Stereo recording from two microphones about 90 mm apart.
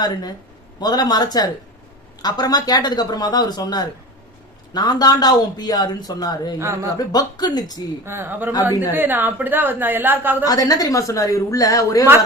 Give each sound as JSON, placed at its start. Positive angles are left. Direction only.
{"t": 0.0, "sound": "speech", "side_deg": 45}
{"t": 8.0, "sound": "a woman's voice", "side_deg": -25}
{"t": 10.4, "sound": "a woman's voice", "side_deg": 45}